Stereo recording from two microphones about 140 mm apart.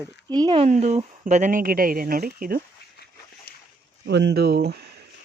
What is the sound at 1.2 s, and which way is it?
Speech, 70° right (ahead or behind).